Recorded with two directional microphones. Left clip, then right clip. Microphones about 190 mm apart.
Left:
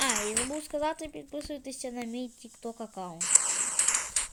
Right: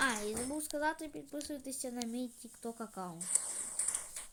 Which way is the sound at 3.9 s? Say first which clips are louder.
Left 14 dB; 35° left (ahead or behind).